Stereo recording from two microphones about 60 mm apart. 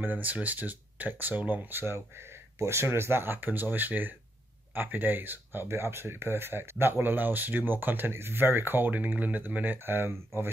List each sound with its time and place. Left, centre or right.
0.0 s speech: right
8.9 s speech: right